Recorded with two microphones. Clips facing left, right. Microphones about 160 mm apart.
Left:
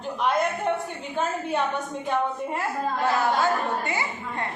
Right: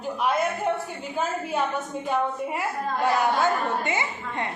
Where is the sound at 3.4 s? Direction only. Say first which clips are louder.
Even; 20° right (ahead or behind).